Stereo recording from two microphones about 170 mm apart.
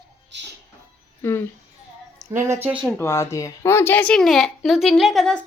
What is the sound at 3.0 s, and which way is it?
Speech, 15° left (ahead or behind).